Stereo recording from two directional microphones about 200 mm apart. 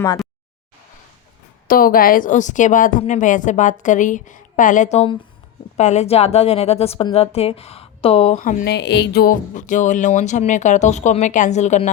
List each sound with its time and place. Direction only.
1.6 s a woman's voice: 45° left (ahead or behind)
8.6 s a woman's voice: 55° left (ahead or behind); by 11.9 s 35° left (ahead or behind)